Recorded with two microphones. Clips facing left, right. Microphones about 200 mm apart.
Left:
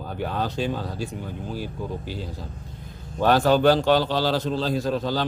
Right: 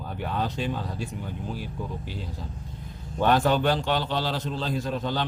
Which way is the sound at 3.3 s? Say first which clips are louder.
Left 6 dB; 35° left (ahead or behind).